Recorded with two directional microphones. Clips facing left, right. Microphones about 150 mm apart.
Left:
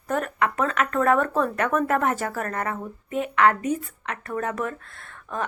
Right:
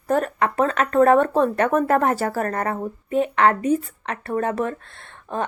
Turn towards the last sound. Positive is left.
turn(degrees=-30)  # may be behind; listen again after turning